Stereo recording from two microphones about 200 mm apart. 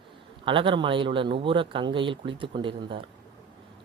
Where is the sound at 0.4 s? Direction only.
25° right (ahead or behind).